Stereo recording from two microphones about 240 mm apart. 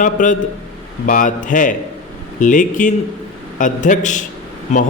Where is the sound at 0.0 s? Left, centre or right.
Left.